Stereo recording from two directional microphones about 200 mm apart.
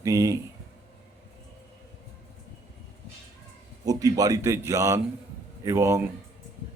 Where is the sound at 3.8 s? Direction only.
20° right (ahead or behind).